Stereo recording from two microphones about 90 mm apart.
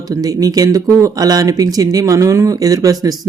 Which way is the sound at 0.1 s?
40° right (ahead or behind).